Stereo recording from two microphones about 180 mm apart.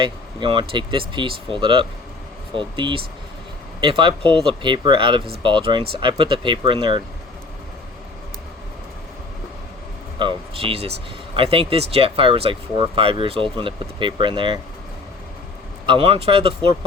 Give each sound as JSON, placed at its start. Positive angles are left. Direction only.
{"t": 0.0, "sound": "speech", "side_deg": -25}
{"t": 10.2, "sound": "speech", "side_deg": -30}
{"t": 15.9, "sound": "speech", "side_deg": -30}